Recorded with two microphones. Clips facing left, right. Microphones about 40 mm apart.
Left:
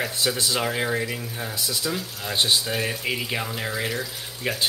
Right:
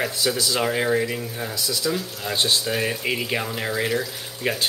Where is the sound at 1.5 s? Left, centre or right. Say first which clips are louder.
Right 1 dB; left.